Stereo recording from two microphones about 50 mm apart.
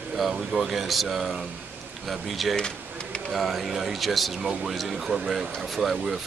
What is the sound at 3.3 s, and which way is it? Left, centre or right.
A man's voice, centre.